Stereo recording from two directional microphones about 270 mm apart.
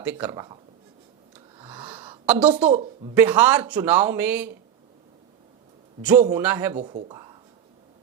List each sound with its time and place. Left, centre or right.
0.0 s a man's voice: centre
1.5 s a sound: centre
2.2 s a woman's voice: centre
2.6 s speech: right
3.2 s a man's voice: centre
6.2 s a man's voice: centre
6.7 s speech: right